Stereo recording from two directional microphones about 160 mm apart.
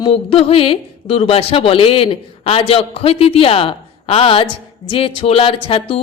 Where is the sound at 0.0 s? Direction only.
35° left (ahead or behind).